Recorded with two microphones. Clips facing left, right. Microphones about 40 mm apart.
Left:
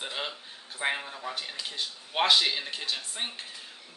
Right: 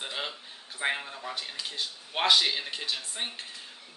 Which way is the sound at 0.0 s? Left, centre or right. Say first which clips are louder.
Even; centre.